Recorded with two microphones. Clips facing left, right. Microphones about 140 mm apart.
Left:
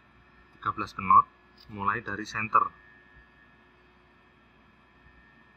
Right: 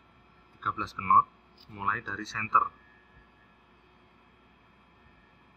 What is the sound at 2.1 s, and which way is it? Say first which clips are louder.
Speech: left 1 dB; 30° left (ahead or behind).